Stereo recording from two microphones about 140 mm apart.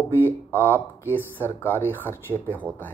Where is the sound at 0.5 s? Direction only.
15° left (ahead or behind).